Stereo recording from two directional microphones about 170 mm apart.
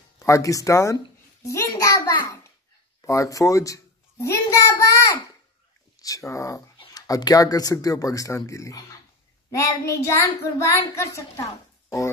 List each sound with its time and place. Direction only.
0.2 s speech: 20° left (ahead or behind)
1.4 s a sound: 20° left (ahead or behind)
3.0 s a woman's voice: 20° left (ahead or behind)